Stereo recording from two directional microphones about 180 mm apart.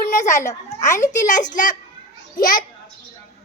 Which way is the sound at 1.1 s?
45° left (ahead or behind).